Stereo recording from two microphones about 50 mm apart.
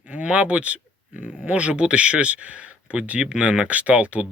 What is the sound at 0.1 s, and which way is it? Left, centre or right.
Speech, right.